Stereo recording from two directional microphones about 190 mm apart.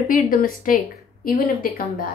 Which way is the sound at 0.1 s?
45° left (ahead or behind).